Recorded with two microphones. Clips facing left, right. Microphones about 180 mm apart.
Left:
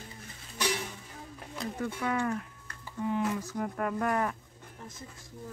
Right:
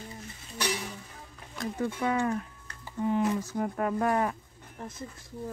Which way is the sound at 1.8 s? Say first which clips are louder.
Right 3 dB; 25° right (ahead or behind).